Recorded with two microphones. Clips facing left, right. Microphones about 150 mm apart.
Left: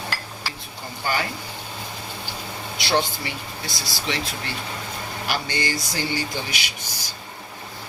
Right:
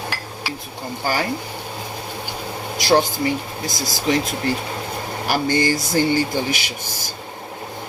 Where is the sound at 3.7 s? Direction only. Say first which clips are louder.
Right 7 dB; 45° right (ahead or behind).